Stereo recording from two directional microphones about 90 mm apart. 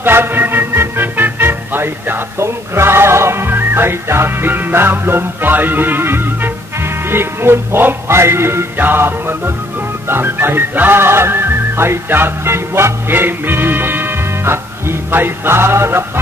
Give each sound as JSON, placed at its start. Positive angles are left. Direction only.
{"t": 0.0, "sound": "music", "side_deg": -25}
{"t": 10.0, "sound": "speech", "side_deg": -25}